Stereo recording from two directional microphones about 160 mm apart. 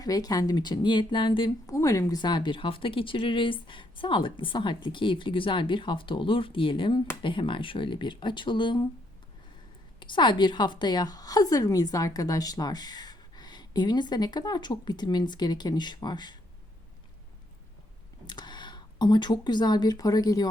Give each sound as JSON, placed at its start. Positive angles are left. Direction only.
{"t": 0.0, "sound": "a woman's voice", "side_deg": 25}
{"t": 1.6, "sound": "speech", "side_deg": 20}
{"t": 10.0, "sound": "a woman's voice", "side_deg": 30}
{"t": 18.3, "sound": "speech", "side_deg": 25}